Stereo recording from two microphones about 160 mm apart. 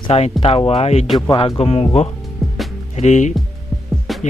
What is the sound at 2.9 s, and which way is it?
Speech, 45° left (ahead or behind).